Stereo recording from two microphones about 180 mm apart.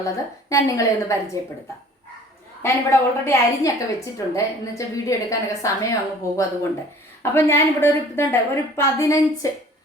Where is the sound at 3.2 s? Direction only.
15° left (ahead or behind).